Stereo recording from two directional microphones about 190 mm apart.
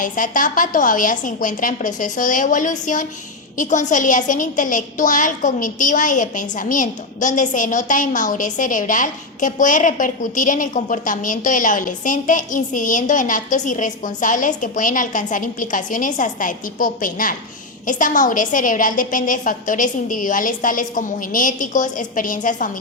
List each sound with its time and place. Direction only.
0.0 s a woman's voice: 45° left (ahead or behind)